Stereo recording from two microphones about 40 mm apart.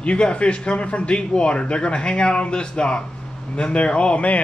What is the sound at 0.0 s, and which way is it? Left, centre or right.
Speech, left.